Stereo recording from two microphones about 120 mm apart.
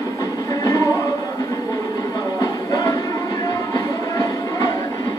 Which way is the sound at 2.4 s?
35° left (ahead or behind).